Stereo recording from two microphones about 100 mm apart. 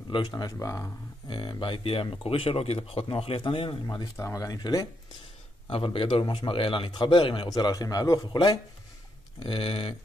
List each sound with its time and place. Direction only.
0.1 s speech: 45° left (ahead or behind)
0.5 s a man's voice: 35° left (ahead or behind)
1.3 s speech: 50° left (ahead or behind)
3.8 s speech: 45° left (ahead or behind)
4.2 s a man's voice: 35° left (ahead or behind)
5.7 s speech: 60° left (ahead or behind)
7.4 s a man's voice: 40° left (ahead or behind)
9.4 s speech: 60° left (ahead or behind)